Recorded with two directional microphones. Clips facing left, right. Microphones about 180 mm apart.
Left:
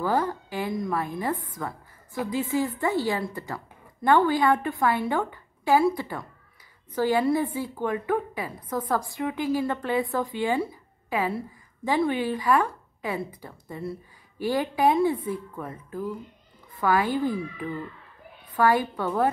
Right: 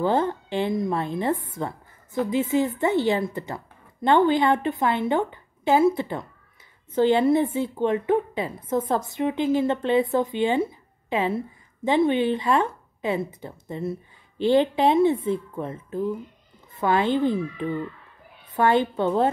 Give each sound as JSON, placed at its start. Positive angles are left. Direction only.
{"t": 0.0, "sound": "a woman's voice", "side_deg": -25}